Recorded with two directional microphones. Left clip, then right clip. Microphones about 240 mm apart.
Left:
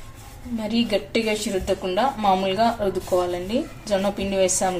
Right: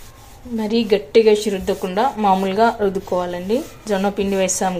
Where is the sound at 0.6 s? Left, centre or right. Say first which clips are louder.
Right 6 dB; right.